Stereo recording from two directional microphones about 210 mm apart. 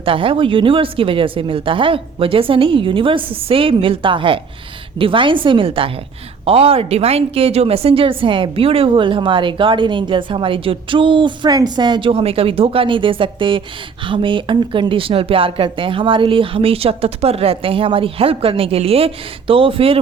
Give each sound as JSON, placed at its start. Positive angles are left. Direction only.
{"t": 0.0, "sound": "a woman's voice", "side_deg": -25}